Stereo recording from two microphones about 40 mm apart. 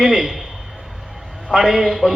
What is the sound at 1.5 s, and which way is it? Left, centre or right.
Speech, centre.